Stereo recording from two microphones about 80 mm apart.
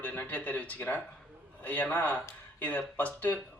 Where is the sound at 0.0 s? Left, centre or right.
Centre.